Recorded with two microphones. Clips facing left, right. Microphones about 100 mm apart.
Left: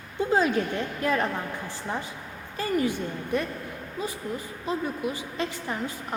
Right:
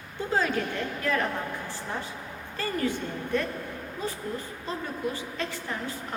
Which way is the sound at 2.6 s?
15° left (ahead or behind).